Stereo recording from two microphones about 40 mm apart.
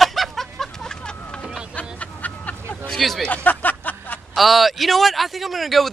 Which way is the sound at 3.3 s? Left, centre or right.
Left.